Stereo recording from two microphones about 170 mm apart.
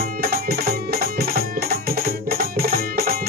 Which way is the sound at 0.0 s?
60° right (ahead or behind).